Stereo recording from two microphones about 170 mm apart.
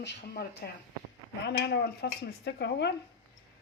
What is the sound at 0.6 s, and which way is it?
Speech, 65° left (ahead or behind).